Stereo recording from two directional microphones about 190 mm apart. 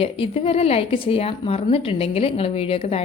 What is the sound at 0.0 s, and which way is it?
Speech, 30° left (ahead or behind).